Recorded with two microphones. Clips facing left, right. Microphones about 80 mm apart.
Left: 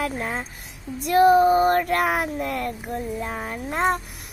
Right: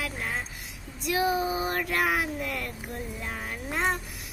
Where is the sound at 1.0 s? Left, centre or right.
Left.